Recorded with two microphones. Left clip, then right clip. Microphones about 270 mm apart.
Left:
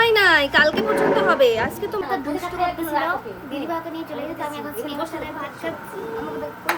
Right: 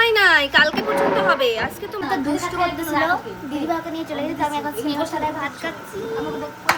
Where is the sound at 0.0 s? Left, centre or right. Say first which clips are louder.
Right 1 dB; centre.